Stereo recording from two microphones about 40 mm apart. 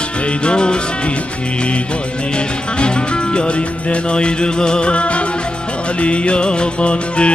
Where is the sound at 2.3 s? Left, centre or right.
Left.